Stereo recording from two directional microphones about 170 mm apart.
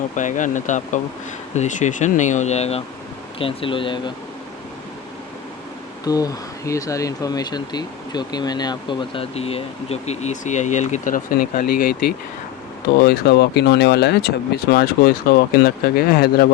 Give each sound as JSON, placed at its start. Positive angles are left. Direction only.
{"t": 0.2, "sound": "speech", "side_deg": 45}
{"t": 6.1, "sound": "speech", "side_deg": 20}
{"t": 13.1, "sound": "speech", "side_deg": 75}